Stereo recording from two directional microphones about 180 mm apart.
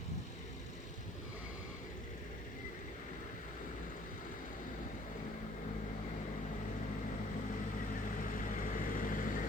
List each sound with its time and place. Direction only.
8.1 s vehicle: 50° left (ahead or behind)